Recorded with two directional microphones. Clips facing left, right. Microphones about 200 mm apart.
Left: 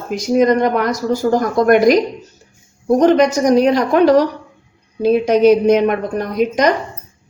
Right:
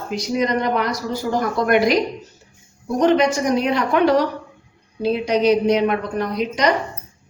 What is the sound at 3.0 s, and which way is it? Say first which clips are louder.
A woman's voice: left 3 dB; 40° left (ahead or behind).